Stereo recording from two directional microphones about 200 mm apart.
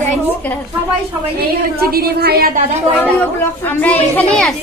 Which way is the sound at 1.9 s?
50° right (ahead or behind).